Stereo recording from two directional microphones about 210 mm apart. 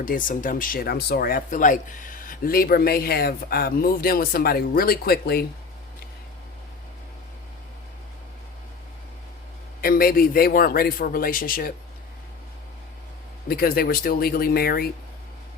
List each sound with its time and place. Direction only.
0.0 s speech: 40° left (ahead or behind)
9.8 s speech: 45° left (ahead or behind)
13.5 s speech: 45° left (ahead or behind)